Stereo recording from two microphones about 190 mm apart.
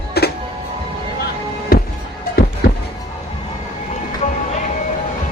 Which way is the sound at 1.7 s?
50° left (ahead or behind).